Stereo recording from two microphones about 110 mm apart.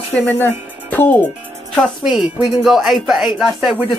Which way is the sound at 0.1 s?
10° left (ahead or behind).